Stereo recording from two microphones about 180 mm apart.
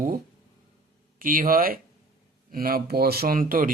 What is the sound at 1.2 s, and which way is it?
Speech, 50° right (ahead or behind).